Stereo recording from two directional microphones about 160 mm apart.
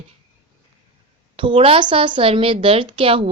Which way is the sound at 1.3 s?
35° right (ahead or behind).